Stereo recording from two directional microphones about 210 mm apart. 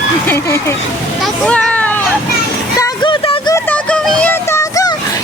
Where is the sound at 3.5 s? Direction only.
5° left (ahead or behind).